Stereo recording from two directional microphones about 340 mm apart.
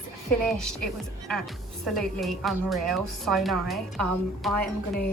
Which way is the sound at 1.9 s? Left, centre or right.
Centre.